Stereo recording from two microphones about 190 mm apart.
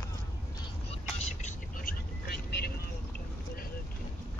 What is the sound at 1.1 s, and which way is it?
Vehicle, 40° left (ahead or behind).